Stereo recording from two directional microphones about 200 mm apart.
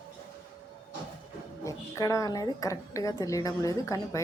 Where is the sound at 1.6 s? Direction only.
15° left (ahead or behind).